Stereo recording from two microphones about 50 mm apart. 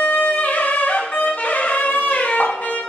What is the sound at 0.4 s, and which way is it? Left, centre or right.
Music, left.